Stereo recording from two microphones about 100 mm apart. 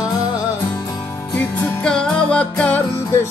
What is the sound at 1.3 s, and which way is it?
Music, 10° left (ahead or behind).